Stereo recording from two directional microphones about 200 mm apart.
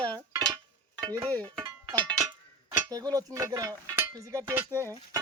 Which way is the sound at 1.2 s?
10° left (ahead or behind).